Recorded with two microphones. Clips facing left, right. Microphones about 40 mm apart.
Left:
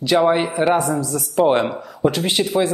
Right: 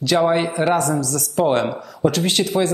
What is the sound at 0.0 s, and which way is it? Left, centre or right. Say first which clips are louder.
Speech: left 1 dB; centre.